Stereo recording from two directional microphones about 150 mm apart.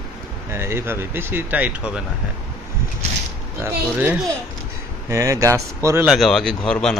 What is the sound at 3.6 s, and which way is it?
Speech, 10° right (ahead or behind).